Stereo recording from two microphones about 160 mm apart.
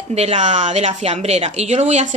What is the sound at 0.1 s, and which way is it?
A woman's voice, 40° right (ahead or behind).